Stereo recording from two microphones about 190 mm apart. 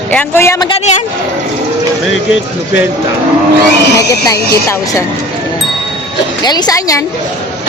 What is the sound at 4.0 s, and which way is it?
Speech, 20° left (ahead or behind).